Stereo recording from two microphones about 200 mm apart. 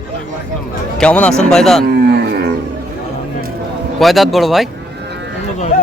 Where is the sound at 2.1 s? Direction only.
55° right (ahead or behind).